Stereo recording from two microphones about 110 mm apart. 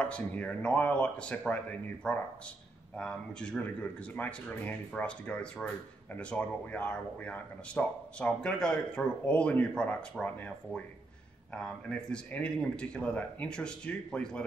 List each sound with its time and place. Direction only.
0.0 s speech: 10° left (ahead or behind)